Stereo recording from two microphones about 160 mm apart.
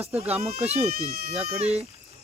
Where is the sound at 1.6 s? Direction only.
40° right (ahead or behind).